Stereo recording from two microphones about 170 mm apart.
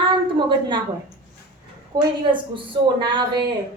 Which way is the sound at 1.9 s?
20° right (ahead or behind).